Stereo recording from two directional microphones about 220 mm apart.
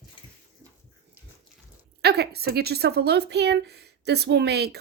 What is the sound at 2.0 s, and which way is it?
A woman's voice, 45° right (ahead or behind).